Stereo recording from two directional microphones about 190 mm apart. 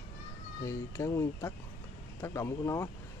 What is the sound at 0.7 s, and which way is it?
Speech, 15° left (ahead or behind).